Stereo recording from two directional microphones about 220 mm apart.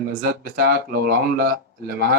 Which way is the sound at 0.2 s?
45° right (ahead or behind).